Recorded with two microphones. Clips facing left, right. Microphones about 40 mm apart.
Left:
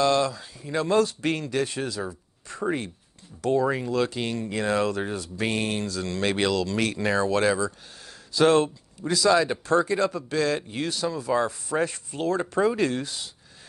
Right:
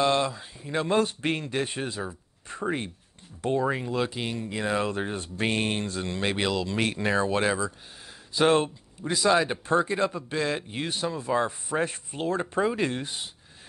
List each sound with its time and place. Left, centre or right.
0.0 s speech: right
3.7 s speech: centre
4.2 s speech: centre; by 6.1 s right
6.3 s speech: centre
12.4 s speech: centre